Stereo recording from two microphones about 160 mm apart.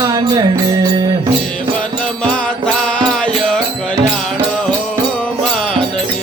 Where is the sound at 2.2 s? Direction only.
5° left (ahead or behind).